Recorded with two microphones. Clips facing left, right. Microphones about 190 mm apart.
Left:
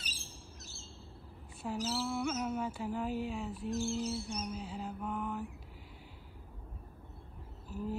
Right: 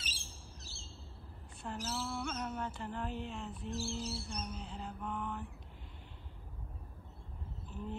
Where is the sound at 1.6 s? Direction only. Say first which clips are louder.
Left 5 dB; 5° left (ahead or behind).